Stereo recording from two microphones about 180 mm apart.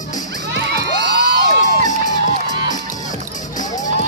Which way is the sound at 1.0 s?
65° right (ahead or behind).